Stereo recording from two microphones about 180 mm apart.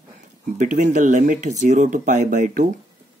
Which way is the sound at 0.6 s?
45° right (ahead or behind).